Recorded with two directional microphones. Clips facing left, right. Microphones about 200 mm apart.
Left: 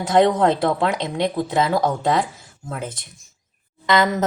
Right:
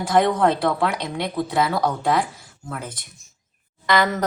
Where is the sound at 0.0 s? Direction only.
20° left (ahead or behind).